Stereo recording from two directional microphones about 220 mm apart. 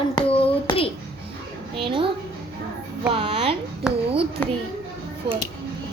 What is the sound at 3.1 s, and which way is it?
Music, 25° right (ahead or behind).